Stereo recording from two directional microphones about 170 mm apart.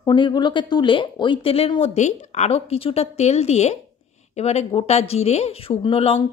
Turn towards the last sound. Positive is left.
turn(degrees=35)  # may be behind; listen again after turning